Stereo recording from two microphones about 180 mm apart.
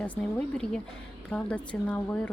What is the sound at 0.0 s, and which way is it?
Speech, 5° left (ahead or behind).